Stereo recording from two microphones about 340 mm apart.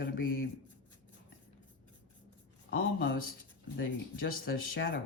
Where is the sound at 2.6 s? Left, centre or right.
Left.